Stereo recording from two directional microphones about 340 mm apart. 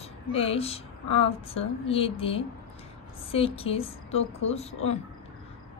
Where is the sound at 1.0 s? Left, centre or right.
Left.